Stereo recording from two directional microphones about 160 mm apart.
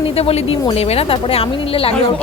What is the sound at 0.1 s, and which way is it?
Speech, 40° left (ahead or behind).